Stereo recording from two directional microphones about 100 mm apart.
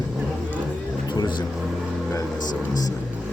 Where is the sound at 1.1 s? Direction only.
50° left (ahead or behind).